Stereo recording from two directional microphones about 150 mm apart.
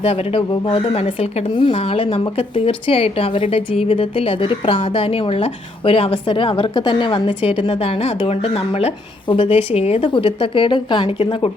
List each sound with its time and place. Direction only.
0.0 s speech: 40° left (ahead or behind)